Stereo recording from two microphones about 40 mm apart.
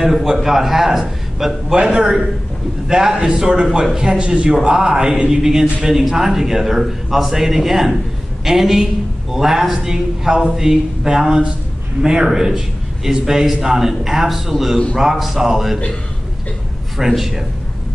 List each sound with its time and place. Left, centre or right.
0.0 s a man's voice: centre
1.8 s a man's voice: right
16.9 s a man's voice: centre